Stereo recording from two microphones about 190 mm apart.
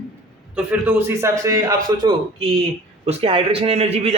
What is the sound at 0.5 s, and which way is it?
A man's voice, 10° right (ahead or behind).